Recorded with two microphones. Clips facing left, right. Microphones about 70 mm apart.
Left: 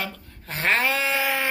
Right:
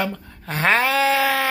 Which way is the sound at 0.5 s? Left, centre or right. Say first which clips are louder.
Right 5 dB; right.